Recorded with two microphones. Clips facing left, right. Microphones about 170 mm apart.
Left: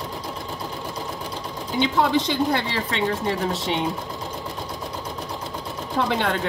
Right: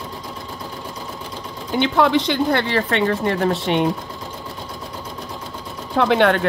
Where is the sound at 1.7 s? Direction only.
65° right (ahead or behind).